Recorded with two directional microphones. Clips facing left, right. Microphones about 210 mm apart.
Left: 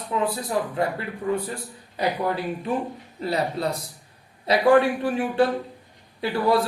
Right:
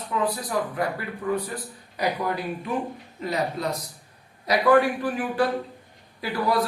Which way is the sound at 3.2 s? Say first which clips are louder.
Left 2 dB; 30° left (ahead or behind).